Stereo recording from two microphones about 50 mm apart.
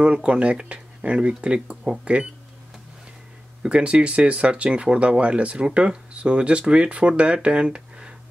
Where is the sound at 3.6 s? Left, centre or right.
Right.